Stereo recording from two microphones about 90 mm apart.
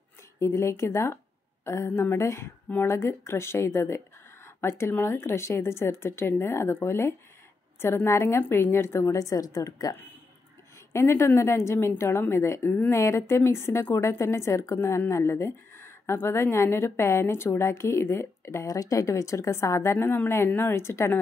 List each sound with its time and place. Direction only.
0.4 s a woman's voice: 30° left (ahead or behind)